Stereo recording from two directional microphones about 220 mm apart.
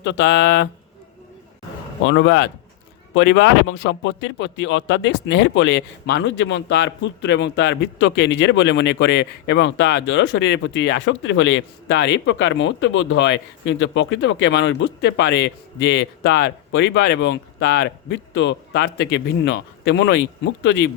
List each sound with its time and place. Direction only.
0.0 s speech: 50° left (ahead or behind)
2.0 s speech: 55° left (ahead or behind)